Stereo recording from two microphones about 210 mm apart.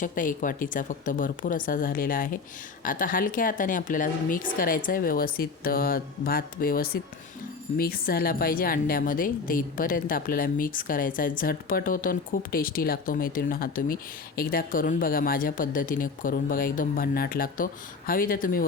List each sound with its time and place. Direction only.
0.0 s a woman's voice: 40° left (ahead or behind)